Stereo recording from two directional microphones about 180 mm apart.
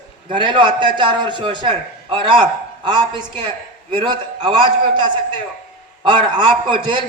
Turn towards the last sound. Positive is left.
turn(degrees=-25)  # may be behind; listen again after turning